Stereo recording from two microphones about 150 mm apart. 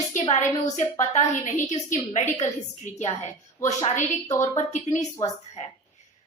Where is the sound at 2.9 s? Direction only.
50° left (ahead or behind).